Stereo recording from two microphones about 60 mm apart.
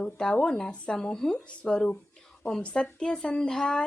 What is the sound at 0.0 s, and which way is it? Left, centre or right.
Speech, centre.